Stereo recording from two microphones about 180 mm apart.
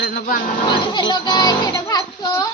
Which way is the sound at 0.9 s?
25° left (ahead or behind).